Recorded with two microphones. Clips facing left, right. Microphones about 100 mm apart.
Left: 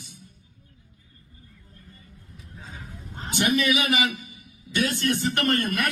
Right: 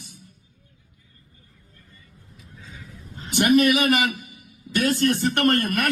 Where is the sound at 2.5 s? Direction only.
35° left (ahead or behind).